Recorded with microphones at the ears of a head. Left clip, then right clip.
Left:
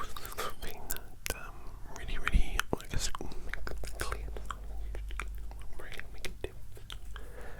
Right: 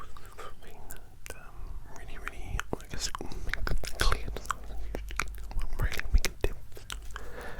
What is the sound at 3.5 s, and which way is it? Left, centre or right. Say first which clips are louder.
Chewing: right 8 dB; right.